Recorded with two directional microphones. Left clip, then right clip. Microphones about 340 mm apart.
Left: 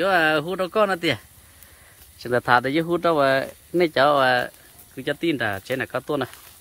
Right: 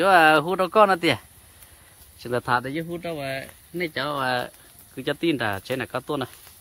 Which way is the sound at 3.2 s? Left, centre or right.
Left.